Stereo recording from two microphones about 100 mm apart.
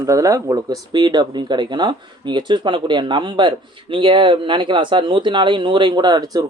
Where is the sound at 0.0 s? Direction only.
35° right (ahead or behind).